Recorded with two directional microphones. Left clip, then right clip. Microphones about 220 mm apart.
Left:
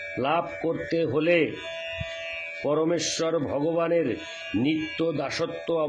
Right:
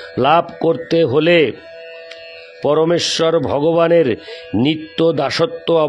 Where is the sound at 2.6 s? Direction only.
50° right (ahead or behind).